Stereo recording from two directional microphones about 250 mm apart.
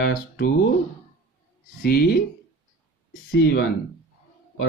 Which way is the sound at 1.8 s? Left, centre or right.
Left.